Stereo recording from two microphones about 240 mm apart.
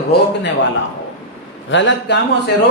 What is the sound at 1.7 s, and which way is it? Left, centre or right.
Speech, left.